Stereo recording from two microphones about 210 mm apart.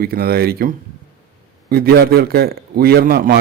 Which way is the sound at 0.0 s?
45° right (ahead or behind).